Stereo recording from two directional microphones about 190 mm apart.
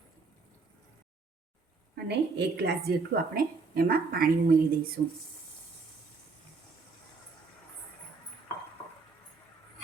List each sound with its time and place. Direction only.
2.0 s a woman's voice: 65° right (ahead or behind)